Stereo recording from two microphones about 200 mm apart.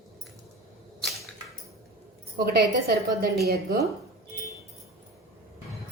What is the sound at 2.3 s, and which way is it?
A woman's voice, 50° right (ahead or behind).